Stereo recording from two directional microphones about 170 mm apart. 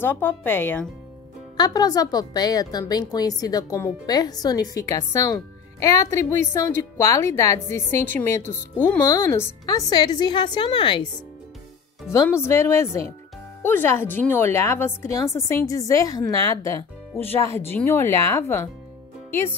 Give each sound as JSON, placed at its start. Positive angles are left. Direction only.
{"t": 0.0, "sound": "a woman's voice", "side_deg": 10}
{"t": 1.6, "sound": "a woman's voice", "side_deg": 25}
{"t": 12.1, "sound": "a woman's voice", "side_deg": 15}